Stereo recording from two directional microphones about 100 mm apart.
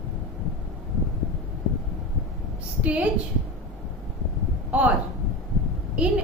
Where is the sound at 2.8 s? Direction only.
15° right (ahead or behind).